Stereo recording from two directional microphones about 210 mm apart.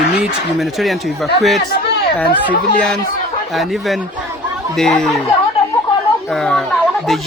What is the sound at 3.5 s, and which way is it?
Speech, centre (ahead or behind).